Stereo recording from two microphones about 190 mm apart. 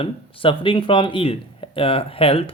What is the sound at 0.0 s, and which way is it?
Speech, 30° left (ahead or behind).